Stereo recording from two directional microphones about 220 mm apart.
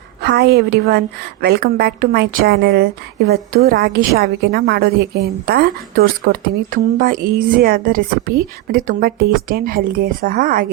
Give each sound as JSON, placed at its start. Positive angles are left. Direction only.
{"t": 0.2, "sound": "a woman's voice", "side_deg": -50}